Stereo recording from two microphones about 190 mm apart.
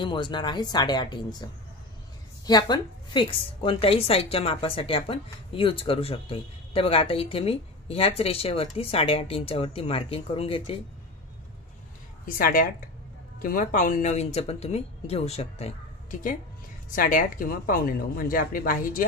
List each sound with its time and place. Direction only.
0.0 s a woman's voice: 25° left (ahead or behind)
12.3 s speech: 50° left (ahead or behind)